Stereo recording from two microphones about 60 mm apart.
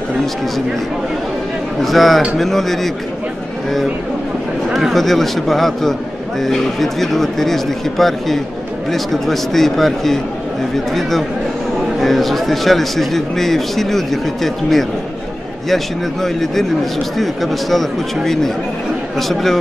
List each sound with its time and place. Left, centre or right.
1.8 s a man's voice: centre
4.7 s a man's voice: centre